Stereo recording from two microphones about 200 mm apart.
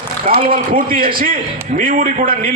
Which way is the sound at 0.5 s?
45° right (ahead or behind).